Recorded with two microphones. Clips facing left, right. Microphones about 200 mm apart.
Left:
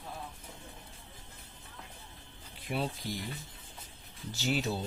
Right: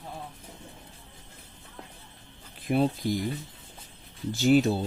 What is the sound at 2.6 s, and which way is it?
Speech, 50° right (ahead or behind).